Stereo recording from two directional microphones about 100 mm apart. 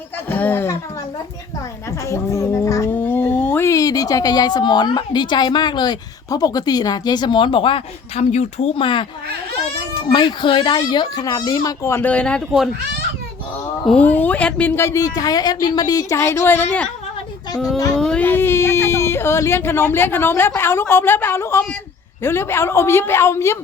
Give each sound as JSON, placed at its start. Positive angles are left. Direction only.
{"t": 0.3, "sound": "a woman's voice", "side_deg": 15}
{"t": 2.0, "sound": "speech", "side_deg": 30}
{"t": 2.9, "sound": "a sound", "side_deg": 20}
{"t": 3.7, "sound": "a woman's voice", "side_deg": 35}
{"t": 10.1, "sound": "a woman's voice", "side_deg": 55}
{"t": 12.0, "sound": "speech", "side_deg": 10}
{"t": 14.0, "sound": "speech", "side_deg": 15}
{"t": 14.8, "sound": "speech", "side_deg": 30}
{"t": 17.9, "sound": "speech", "side_deg": 5}
{"t": 18.2, "sound": "a woman's voice", "side_deg": 20}